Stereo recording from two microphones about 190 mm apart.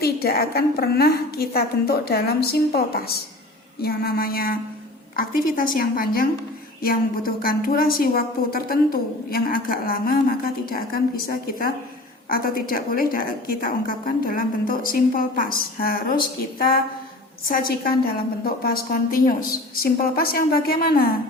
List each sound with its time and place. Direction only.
0.0 s a woman's voice: 55° left (ahead or behind)